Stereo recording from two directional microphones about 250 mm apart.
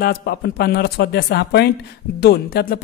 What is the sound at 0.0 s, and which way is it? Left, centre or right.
Speech, left.